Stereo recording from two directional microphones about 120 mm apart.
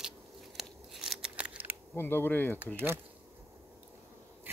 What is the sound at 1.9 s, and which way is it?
Speech, 20° left (ahead or behind).